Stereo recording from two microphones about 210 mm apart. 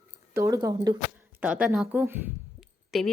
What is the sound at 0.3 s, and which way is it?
A woman's voice, 15° right (ahead or behind).